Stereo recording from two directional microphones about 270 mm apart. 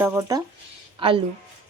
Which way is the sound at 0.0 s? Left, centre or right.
Centre.